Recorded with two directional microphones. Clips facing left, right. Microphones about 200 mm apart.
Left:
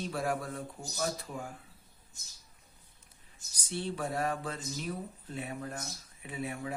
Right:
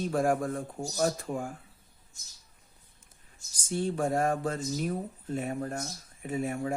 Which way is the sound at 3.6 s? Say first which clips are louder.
Right 6 dB; 45° right (ahead or behind).